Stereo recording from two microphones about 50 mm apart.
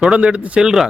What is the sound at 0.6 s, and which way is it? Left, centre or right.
Speech, centre.